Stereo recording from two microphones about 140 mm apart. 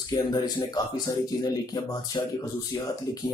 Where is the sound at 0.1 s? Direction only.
30° left (ahead or behind).